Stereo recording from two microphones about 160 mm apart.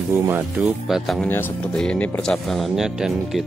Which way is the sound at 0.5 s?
Centre (ahead or behind).